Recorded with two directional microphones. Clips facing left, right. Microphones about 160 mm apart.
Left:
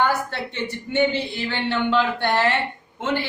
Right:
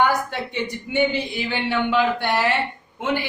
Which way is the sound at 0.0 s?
15° right (ahead or behind).